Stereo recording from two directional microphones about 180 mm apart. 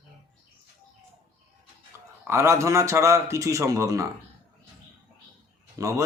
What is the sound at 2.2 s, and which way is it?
A man's voice, 15° right (ahead or behind).